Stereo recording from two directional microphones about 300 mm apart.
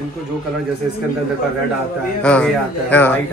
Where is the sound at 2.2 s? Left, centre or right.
Centre.